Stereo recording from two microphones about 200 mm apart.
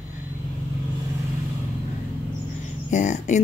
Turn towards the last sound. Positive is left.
turn(degrees=35)  # may be behind; listen again after turning